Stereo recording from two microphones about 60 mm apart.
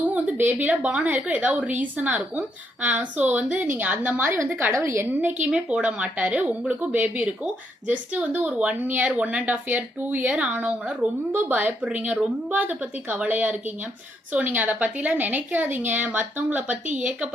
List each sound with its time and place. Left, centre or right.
0.0 s a sound: right
0.3 s speech: right
4.8 s a woman's voice: right
5.5 s a woman's voice: centre; by 11.7 s right
11.8 s a woman's voice: centre